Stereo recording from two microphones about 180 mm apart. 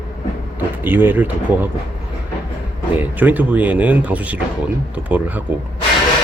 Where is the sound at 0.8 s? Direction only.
10° right (ahead or behind).